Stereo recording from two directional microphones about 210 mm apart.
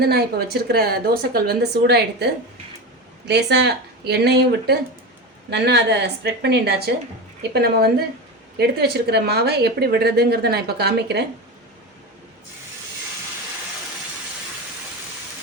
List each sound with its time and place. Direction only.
0.0 s speech: 50° right (ahead or behind)
3.2 s speech: 55° right (ahead or behind)